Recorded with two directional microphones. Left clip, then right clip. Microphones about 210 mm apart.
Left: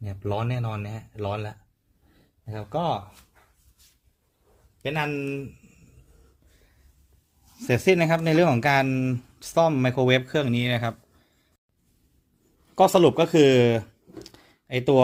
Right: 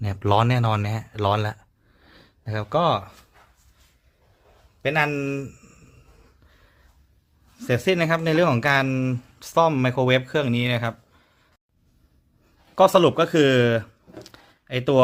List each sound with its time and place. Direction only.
0.0 s speech: 45° right (ahead or behind)
4.8 s speech: 35° right (ahead or behind)
7.6 s speech: centre (ahead or behind)
12.7 s speech: 5° right (ahead or behind)